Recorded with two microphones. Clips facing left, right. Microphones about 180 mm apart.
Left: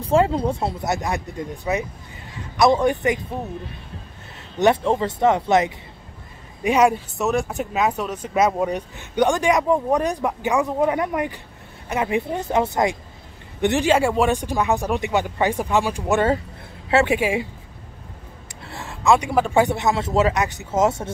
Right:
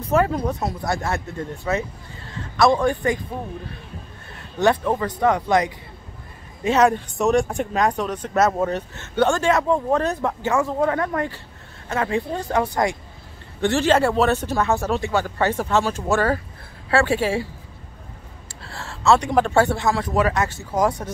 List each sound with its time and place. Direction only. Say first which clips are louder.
0.0 s a man's voice: left 2 dB; 25° left (ahead or behind)
4.6 s a man's voice: left 1 dB; 20° left (ahead or behind)
6.6 s a man's voice: even; 10° left (ahead or behind)
18.6 s a man's voice: even; 20° left (ahead or behind)